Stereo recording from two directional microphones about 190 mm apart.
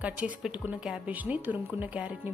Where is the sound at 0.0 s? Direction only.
5° right (ahead or behind).